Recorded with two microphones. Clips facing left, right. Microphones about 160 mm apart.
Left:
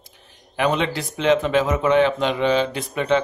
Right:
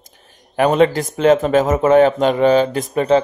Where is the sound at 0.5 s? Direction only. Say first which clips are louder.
Right 8 dB; 45° right (ahead or behind).